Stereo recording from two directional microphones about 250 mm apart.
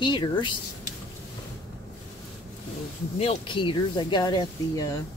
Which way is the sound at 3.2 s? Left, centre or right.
Left.